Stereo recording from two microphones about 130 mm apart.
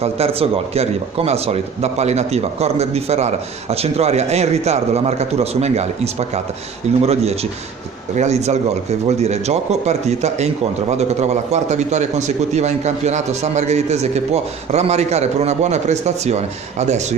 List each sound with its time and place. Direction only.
0.0 s speech: 50° right (ahead or behind)